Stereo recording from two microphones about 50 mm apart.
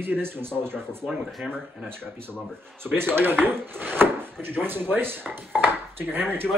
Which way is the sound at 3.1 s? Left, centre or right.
Right.